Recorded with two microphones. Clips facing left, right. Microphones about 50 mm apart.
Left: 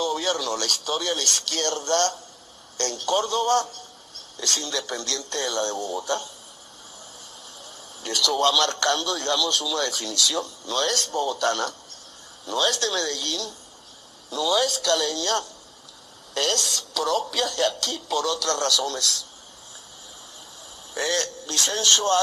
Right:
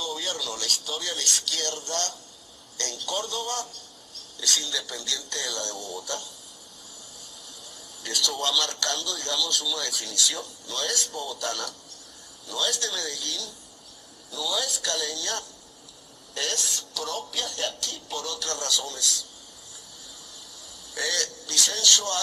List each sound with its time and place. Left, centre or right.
0.0 s a sound: left
1.0 s a man's voice: left
4.4 s speech: left
4.7 s a man's voice: left
5.3 s a man's voice: left
7.6 s a man's voice: left
14.3 s a man's voice: left
16.3 s a woman's voice: left
18.4 s a man's voice: left
20.9 s a man's voice: left